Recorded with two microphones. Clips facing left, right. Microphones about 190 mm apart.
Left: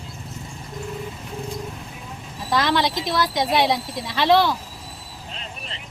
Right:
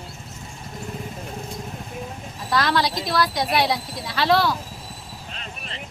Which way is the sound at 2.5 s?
20° left (ahead or behind).